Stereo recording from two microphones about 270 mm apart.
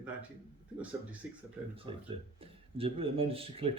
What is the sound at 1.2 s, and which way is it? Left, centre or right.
Speech, centre.